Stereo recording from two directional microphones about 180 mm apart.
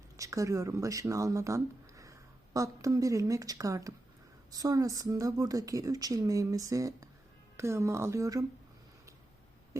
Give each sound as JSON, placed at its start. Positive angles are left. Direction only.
{"t": 0.2, "sound": "speech", "side_deg": -20}